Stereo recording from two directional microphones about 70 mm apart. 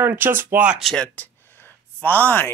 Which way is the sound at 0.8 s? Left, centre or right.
Centre.